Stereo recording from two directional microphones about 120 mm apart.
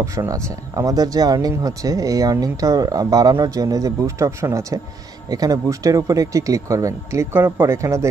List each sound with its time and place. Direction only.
0.0 s speech: 25° right (ahead or behind)